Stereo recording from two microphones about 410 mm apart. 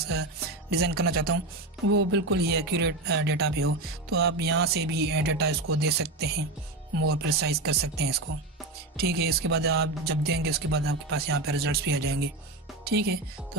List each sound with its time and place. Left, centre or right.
0.1 s music: right
2.0 s speech: right
8.3 s speech: right
8.9 s speech: right